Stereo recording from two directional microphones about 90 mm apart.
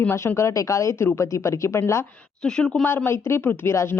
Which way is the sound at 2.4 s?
10° left (ahead or behind).